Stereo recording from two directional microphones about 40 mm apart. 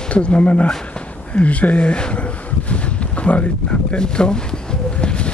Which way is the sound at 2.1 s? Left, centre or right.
Left.